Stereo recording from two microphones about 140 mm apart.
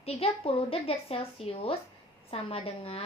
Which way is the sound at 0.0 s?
45° left (ahead or behind).